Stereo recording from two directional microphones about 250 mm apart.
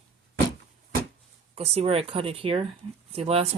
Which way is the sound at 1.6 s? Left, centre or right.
Right.